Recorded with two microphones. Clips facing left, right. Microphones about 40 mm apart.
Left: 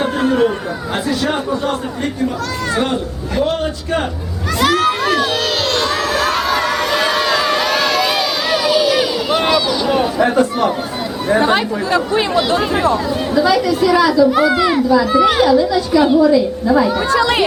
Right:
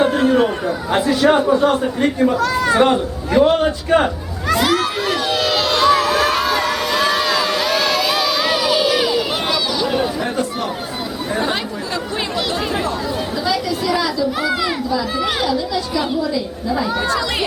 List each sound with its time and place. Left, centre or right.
0.0 s chatter: centre
0.9 s speech: centre
4.6 s speech: centre
5.7 s crowd: centre
8.4 s a sound: centre
10.2 s a child's voice: left
11.3 s speech: left
12.4 s a child's voice: centre
14.3 s a child's voice: centre
17.2 s speech: left